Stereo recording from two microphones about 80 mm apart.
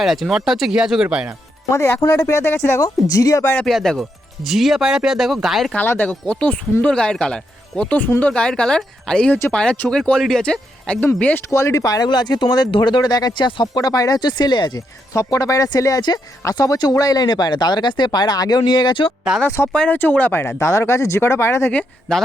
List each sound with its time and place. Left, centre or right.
0.0 s speech: centre
1.7 s speech: left
2.8 s speech: left
3.7 s speech: centre
6.0 s speech: centre
11.5 s speech: left
12.0 s speech: left
15.1 s speech: left
16.9 s speech: left
19.6 s speech: centre; by 21.7 s left
22.1 s speech: centre